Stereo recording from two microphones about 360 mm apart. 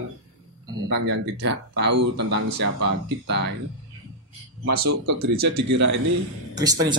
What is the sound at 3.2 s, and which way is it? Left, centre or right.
Speech, right.